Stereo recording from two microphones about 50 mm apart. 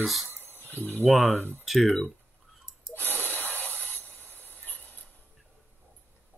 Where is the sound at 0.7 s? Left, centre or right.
Left.